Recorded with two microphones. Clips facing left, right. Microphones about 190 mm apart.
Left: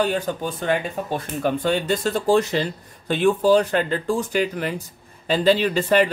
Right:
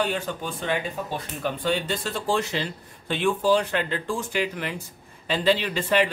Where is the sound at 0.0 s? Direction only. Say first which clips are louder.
Left 5 dB; 40° left (ahead or behind).